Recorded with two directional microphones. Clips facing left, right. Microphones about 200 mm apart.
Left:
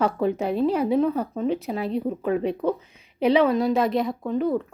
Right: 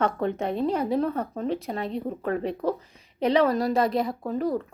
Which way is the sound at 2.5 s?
35° right (ahead or behind).